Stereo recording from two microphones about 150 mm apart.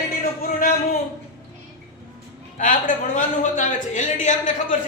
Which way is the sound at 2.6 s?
60° left (ahead or behind).